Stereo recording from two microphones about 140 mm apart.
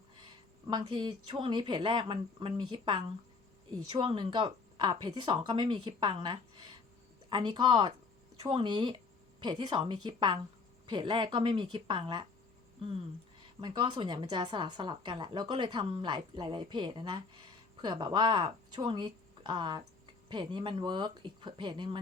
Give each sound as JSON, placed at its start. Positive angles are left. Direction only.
{"t": 0.7, "sound": "a woman's voice", "side_deg": -35}
{"t": 13.6, "sound": "a woman's voice", "side_deg": -35}